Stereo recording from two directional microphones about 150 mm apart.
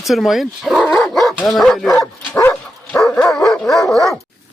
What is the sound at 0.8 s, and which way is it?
Dog, 5° left (ahead or behind).